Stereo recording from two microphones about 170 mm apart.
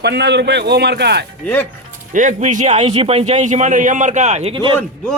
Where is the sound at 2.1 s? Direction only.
50° right (ahead or behind); by 4.8 s 30° right (ahead or behind).